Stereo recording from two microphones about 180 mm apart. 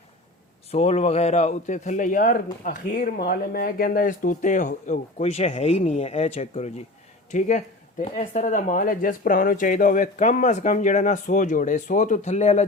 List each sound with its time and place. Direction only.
0.7 s a man's voice: 35° left (ahead or behind)